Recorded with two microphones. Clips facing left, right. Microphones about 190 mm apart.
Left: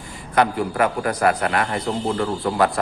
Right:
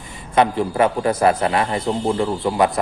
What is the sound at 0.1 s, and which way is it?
A man's voice, 25° right (ahead or behind).